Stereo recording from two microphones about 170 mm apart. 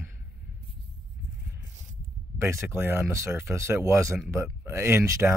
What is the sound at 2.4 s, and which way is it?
Speech, 15° right (ahead or behind).